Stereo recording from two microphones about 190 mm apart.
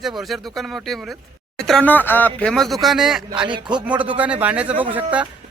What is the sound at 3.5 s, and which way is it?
Speech, 25° right (ahead or behind).